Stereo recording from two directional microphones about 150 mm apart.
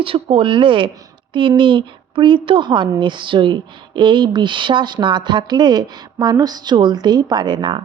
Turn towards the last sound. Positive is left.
turn(degrees=-30)  # may be behind; listen again after turning